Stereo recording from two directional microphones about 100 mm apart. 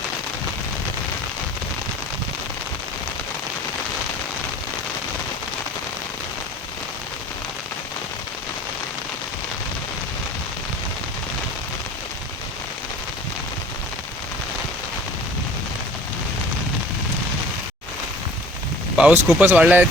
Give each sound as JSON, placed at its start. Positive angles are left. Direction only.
{"t": 18.9, "sound": "speech", "side_deg": -10}